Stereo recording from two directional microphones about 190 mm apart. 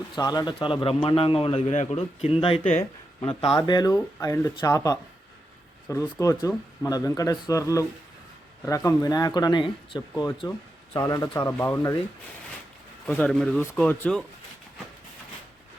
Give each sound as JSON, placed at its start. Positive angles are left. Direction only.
{"t": 0.2, "sound": "a man's voice", "side_deg": 20}
{"t": 13.1, "sound": "speech", "side_deg": 5}